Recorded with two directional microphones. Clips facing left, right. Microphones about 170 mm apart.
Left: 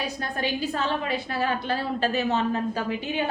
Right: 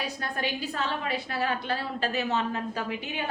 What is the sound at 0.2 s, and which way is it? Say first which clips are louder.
A woman's voice: left 4 dB; 30° left (ahead or behind).